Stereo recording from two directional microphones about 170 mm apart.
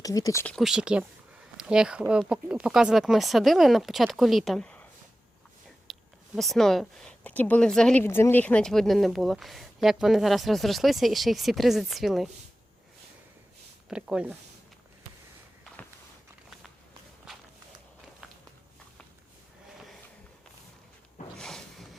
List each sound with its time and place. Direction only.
0.0 s speech: 20° left (ahead or behind)
0.4 s speech: centre (ahead or behind)
5.9 s speech: centre (ahead or behind)
13.8 s speech: 5° right (ahead or behind)
21.3 s a sound: centre (ahead or behind)